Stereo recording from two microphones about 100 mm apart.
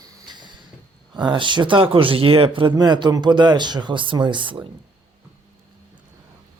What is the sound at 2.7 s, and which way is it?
Speech, 45° right (ahead or behind).